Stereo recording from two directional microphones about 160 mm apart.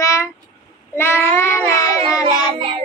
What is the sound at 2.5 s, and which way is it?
Music, 35° right (ahead or behind).